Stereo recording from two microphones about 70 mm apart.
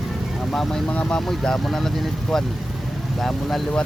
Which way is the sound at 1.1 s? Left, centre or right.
Centre.